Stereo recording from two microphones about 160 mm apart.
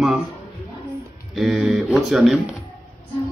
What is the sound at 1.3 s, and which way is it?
Speech, centre (ahead or behind).